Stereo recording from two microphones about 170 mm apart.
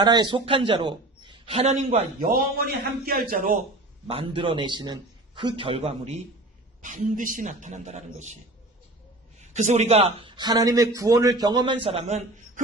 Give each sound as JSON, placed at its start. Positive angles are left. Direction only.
{"t": 0.0, "sound": "a man's voice", "side_deg": -25}
{"t": 2.2, "sound": "a man's voice", "side_deg": -60}
{"t": 4.1, "sound": "a man's voice", "side_deg": -30}
{"t": 6.8, "sound": "speech", "side_deg": -50}
{"t": 9.4, "sound": "a man's voice", "side_deg": -45}